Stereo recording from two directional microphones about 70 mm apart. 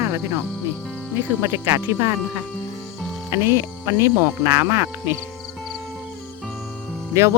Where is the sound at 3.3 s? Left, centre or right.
Right.